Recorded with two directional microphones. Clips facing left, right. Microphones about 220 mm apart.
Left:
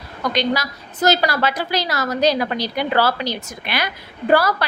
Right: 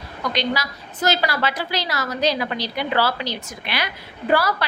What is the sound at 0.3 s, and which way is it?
A woman's voice, 45° left (ahead or behind).